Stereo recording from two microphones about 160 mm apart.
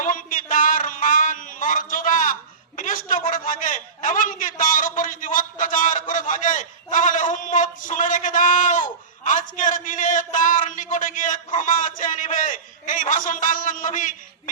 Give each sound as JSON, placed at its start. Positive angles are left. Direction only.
{"t": 0.0, "sound": "a man's voice", "side_deg": 55}